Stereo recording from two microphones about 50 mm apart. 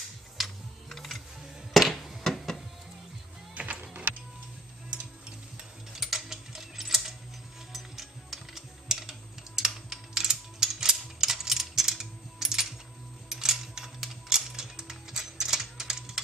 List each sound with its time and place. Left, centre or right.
0.4 s typing: centre
1.7 s music: centre
3.5 s music: right
5.6 s mechanisms: centre
7.7 s music: centre
9.6 s a sound: centre
13.3 s music: centre
15.6 s a sound: centre